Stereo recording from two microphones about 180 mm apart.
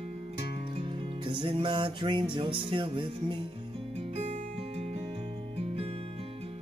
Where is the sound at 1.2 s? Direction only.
30° right (ahead or behind).